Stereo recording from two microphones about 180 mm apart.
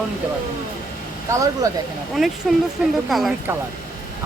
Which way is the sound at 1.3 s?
20° right (ahead or behind).